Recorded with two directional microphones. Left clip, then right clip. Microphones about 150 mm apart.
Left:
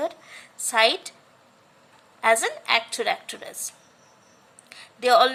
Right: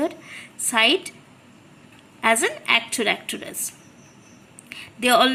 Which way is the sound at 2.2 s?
15° left (ahead or behind).